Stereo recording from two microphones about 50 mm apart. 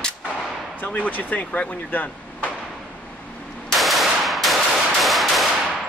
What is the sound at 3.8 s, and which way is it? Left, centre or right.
Gunshot, centre.